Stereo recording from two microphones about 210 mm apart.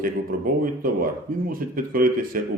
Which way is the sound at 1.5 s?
40° right (ahead or behind).